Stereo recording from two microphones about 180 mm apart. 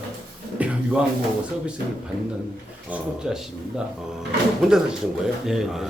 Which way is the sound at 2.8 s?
5° right (ahead or behind).